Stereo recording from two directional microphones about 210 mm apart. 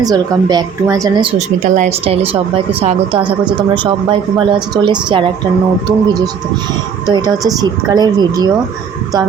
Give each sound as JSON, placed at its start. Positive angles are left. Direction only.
{"t": 0.0, "sound": "speech", "side_deg": -20}
{"t": 1.6, "sound": "speech", "side_deg": -35}
{"t": 3.8, "sound": "speech", "side_deg": -25}
{"t": 7.1, "sound": "speech", "side_deg": -20}